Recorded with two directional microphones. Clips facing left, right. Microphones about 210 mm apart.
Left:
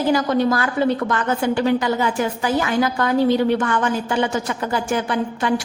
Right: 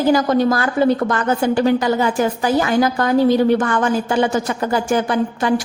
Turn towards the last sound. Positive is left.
turn(degrees=-40)  # may be behind; listen again after turning